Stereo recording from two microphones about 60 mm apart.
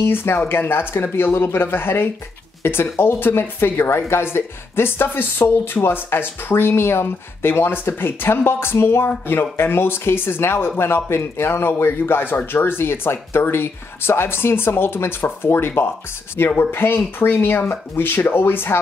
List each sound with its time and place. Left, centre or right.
0.0 s speech: left